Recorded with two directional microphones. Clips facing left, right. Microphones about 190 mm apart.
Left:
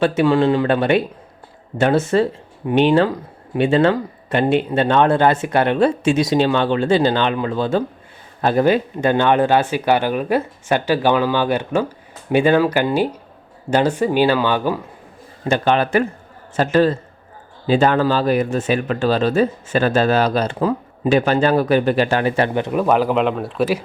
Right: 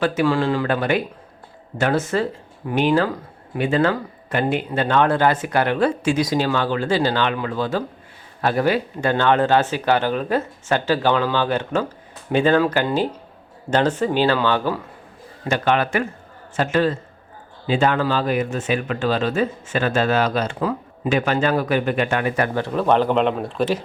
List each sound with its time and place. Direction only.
0.0 s speech: 25° left (ahead or behind)
15.4 s speech: 30° left (ahead or behind)
22.5 s speech: 15° left (ahead or behind)